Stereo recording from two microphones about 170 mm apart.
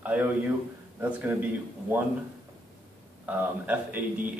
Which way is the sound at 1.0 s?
10° right (ahead or behind).